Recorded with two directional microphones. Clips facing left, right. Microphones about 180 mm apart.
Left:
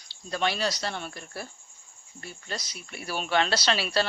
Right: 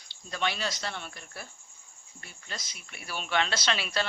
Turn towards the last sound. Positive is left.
turn(degrees=35)  # may be behind; listen again after turning